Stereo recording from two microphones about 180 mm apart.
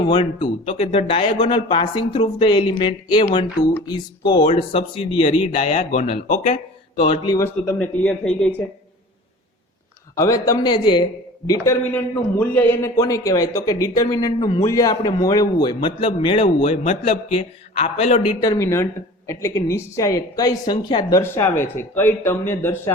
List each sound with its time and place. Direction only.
0.1 s a man's voice: 25° left (ahead or behind)
4.3 s speech: 25° left (ahead or behind)
7.0 s a man's voice: 25° left (ahead or behind)
7.6 s speech: 5° left (ahead or behind)
10.2 s a man's voice: 20° left (ahead or behind)
11.4 s a man's voice: 15° left (ahead or behind); by 18.3 s 35° left (ahead or behind)
18.4 s a woman's voice: 15° left (ahead or behind)